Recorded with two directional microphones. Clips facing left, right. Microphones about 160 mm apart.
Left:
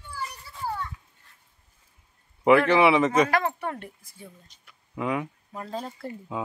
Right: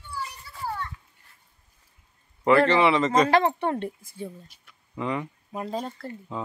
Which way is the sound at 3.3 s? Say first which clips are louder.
Right 5 dB; 30° right (ahead or behind).